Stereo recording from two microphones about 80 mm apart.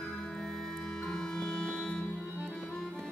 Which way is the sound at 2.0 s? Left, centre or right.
Left.